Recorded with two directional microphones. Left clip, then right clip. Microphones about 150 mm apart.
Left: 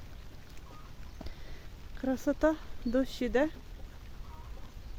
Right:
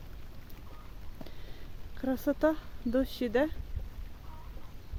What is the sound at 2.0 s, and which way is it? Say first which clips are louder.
Speech: even; centre (ahead or behind).